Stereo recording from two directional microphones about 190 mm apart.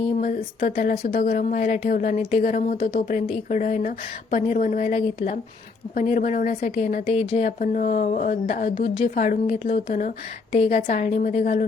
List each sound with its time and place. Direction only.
0.0 s speech: 40° left (ahead or behind)